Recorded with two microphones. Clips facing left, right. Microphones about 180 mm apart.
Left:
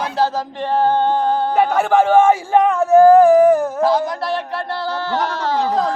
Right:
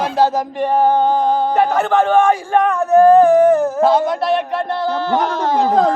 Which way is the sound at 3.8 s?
25° right (ahead or behind).